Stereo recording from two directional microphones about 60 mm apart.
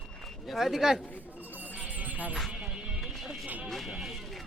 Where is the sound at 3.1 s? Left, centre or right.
Centre.